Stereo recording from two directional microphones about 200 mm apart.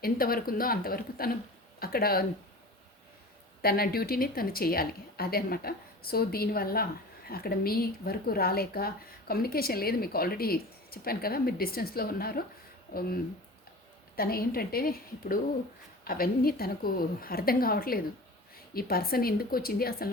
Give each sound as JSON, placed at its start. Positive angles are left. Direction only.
{"t": 0.0, "sound": "speech", "side_deg": 50}
{"t": 3.6, "sound": "speech", "side_deg": 50}
{"t": 14.2, "sound": "speech", "side_deg": 50}